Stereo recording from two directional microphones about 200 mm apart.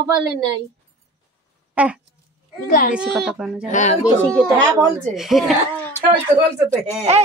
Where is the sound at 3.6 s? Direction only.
35° left (ahead or behind).